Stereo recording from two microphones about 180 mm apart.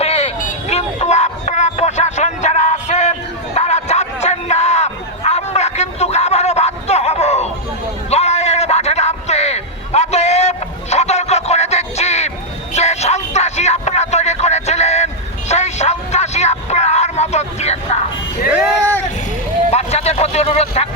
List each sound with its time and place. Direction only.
0.0 s vehicle: 35° left (ahead or behind)
8.1 s a sound: 35° left (ahead or behind)
12.7 s music: 40° left (ahead or behind)
19.7 s vehicle: 35° left (ahead or behind)